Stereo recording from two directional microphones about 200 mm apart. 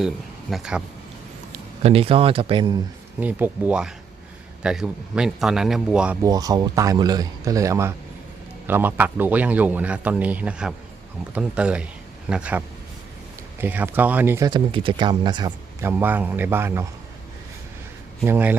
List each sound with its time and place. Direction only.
0.5 s a man's voice: 5° right (ahead or behind)
1.8 s speech: 30° right (ahead or behind)
3.2 s a man's voice: 10° right (ahead or behind)
6.2 s a man's voice: 20° right (ahead or behind)
18.2 s speech: 10° right (ahead or behind)